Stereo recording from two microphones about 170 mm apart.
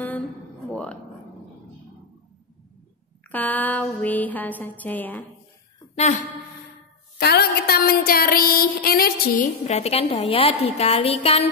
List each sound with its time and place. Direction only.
0.7 s music: 5° left (ahead or behind)
3.3 s music: 10° left (ahead or behind)
5.9 s a woman's voice: 45° left (ahead or behind)
7.2 s a sound: 70° left (ahead or behind); by 11.4 s 35° left (ahead or behind)